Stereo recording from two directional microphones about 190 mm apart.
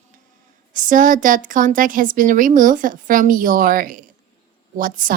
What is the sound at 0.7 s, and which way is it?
A woman's voice, 45° right (ahead or behind).